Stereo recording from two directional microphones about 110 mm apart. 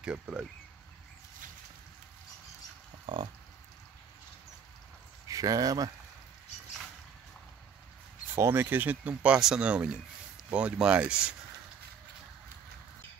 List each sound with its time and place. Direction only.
0.0 s speech: 10° right (ahead or behind)
3.1 s a sound: 50° right (ahead or behind)
5.3 s speech: 35° right (ahead or behind)
8.4 s speech: 25° right (ahead or behind)